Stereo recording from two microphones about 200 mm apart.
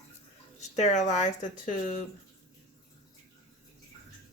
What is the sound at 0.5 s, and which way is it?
Speech, 35° left (ahead or behind).